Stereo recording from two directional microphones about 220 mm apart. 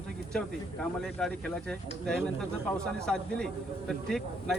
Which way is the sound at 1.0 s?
5° left (ahead or behind).